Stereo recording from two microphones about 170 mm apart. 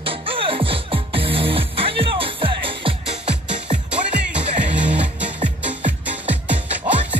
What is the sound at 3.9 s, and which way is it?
Music, 5° right (ahead or behind).